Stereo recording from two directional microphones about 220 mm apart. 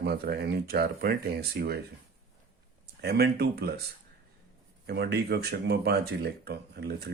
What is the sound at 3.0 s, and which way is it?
Speech, 45° right (ahead or behind).